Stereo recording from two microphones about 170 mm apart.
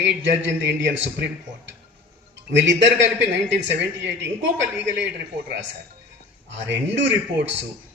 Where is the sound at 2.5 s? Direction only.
90° right.